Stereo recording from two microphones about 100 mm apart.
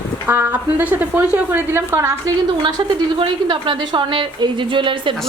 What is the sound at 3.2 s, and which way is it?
A woman's voice, 60° right (ahead or behind).